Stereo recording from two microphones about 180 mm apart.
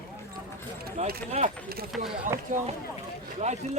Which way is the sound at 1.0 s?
40° right (ahead or behind).